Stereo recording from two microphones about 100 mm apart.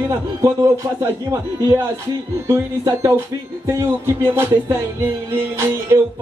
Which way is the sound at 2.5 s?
30° right (ahead or behind).